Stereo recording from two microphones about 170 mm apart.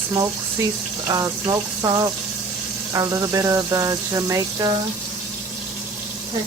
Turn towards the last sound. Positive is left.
turn(degrees=-20)  # may be behind; listen again after turning